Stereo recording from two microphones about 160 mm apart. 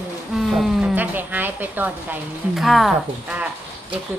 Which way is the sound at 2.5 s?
Centre (ahead or behind).